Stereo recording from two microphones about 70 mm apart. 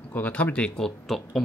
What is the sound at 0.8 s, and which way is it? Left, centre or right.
Speech, centre.